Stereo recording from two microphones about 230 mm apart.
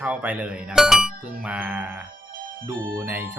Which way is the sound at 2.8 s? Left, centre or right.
Centre.